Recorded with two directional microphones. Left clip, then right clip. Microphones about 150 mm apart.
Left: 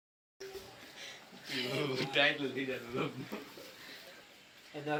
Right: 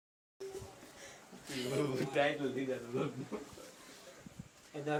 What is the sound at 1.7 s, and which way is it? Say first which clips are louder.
Speech: right 1 dB; 90° right.